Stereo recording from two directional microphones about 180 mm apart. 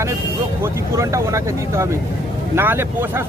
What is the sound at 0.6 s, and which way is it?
Speech, 15° right (ahead or behind).